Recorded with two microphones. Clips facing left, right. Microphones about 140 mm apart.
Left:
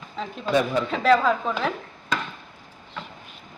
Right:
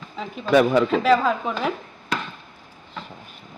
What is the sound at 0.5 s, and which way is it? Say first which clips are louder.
Speech: right 6 dB; 70° right (ahead or behind).